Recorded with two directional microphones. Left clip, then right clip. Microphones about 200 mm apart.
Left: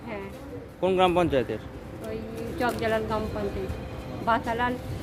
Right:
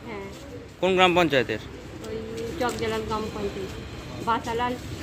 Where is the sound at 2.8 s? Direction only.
15° left (ahead or behind).